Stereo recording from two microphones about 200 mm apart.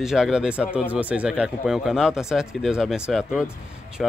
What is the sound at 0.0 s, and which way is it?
Speech, centre (ahead or behind).